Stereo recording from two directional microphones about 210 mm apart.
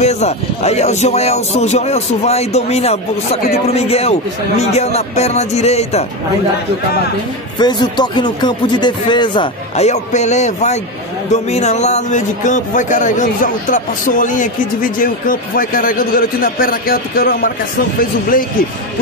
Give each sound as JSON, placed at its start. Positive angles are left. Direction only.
{"t": 0.0, "sound": "speech", "side_deg": 30}
{"t": 7.5, "sound": "speech", "side_deg": 20}